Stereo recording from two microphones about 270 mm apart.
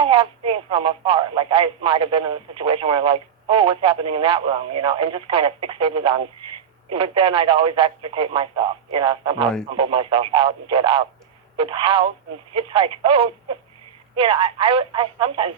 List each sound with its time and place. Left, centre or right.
0.0 s speech: centre